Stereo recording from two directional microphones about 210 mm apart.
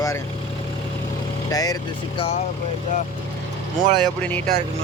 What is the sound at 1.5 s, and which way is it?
Speech, 15° left (ahead or behind).